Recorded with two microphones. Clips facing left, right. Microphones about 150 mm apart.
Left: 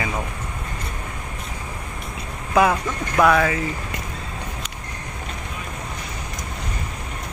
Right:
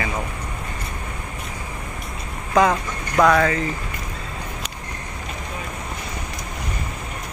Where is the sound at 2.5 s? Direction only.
10° left (ahead or behind).